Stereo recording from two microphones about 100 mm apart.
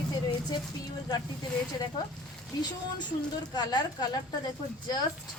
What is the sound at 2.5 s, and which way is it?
A woman's voice, 40° left (ahead or behind).